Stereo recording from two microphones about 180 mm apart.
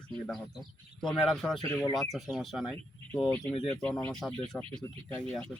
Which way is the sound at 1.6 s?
15° left (ahead or behind).